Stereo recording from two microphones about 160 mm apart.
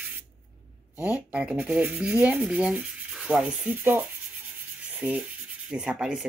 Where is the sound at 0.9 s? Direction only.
10° right (ahead or behind).